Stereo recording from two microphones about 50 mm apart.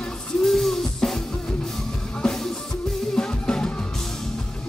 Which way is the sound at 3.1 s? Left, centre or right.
Centre.